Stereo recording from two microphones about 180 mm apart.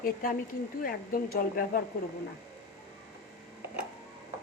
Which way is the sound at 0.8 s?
55° left (ahead or behind).